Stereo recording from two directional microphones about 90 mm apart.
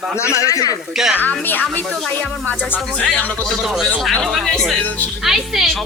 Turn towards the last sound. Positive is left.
turn(degrees=-5)  # may be behind; listen again after turning